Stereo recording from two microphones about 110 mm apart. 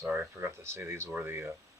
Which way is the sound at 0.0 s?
20° right (ahead or behind).